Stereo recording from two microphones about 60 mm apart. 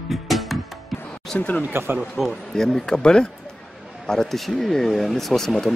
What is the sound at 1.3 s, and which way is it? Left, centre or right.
Speech, centre.